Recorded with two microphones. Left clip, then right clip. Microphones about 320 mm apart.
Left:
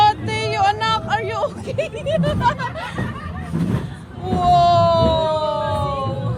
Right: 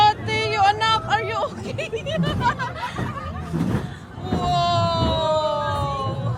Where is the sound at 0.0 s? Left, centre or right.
Centre.